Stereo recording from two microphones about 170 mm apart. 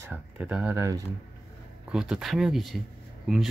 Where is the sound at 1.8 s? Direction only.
5° right (ahead or behind).